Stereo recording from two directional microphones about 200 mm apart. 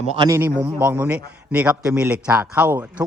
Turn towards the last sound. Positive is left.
turn(degrees=-5)  # may be behind; listen again after turning